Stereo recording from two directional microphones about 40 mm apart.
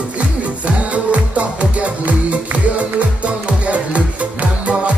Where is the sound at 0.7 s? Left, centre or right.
Right.